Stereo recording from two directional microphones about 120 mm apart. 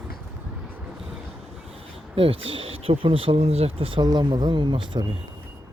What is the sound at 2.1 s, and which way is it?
Speech, 50° right (ahead or behind).